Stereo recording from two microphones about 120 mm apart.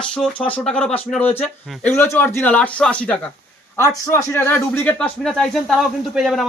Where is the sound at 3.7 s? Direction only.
25° left (ahead or behind).